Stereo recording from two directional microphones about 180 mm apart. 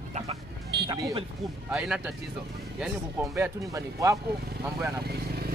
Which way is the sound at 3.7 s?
20° right (ahead or behind).